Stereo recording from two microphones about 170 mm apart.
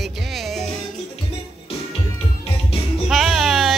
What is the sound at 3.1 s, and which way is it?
Music, centre (ahead or behind).